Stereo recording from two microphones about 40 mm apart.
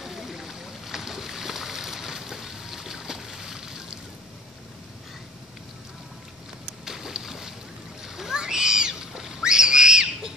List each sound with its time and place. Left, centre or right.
0.0 s boat: centre
6.8 s boat: centre
8.0 s a sound: centre